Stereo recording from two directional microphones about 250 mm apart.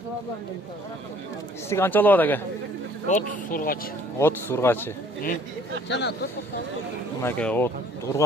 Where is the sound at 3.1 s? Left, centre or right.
Left.